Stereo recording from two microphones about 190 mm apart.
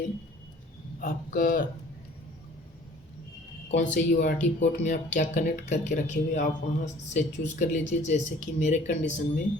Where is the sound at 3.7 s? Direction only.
40° left (ahead or behind).